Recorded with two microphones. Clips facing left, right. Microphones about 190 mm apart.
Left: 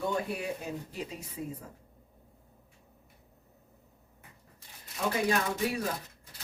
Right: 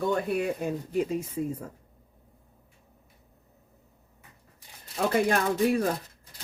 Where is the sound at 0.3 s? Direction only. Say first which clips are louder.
Right 8 dB; 55° right (ahead or behind).